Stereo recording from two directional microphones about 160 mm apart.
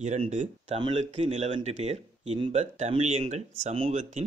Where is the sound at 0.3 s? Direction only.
45° right (ahead or behind).